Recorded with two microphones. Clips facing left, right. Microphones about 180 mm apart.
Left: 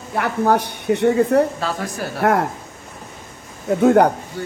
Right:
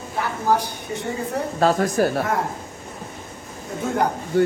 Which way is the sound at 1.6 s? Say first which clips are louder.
Right 7 dB; 45° right (ahead or behind).